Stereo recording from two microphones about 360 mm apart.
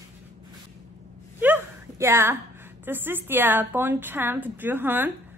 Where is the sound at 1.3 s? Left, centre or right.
Centre.